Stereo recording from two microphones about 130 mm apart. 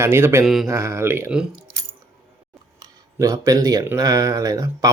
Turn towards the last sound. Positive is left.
turn(degrees=-25)  # may be behind; listen again after turning